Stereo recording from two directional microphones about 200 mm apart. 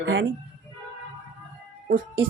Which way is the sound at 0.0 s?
65° right (ahead or behind).